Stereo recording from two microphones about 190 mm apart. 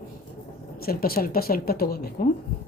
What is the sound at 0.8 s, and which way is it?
A woman's voice, 50° left (ahead or behind).